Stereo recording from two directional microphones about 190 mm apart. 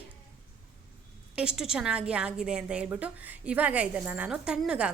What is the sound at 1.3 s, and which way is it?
A woman's voice, 5° right (ahead or behind).